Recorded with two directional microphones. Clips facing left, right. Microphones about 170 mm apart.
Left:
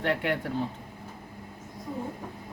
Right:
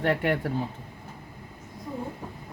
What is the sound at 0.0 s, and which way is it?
Speech, 45° right (ahead or behind).